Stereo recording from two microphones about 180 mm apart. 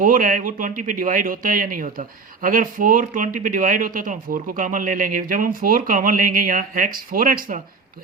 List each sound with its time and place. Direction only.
0.0 s speech: 50° right (ahead or behind)